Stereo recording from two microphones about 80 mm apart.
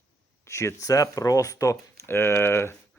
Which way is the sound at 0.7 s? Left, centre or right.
Left.